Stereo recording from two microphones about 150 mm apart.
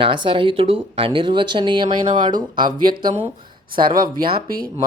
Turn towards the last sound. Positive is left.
turn(degrees=-75)  # may be behind; listen again after turning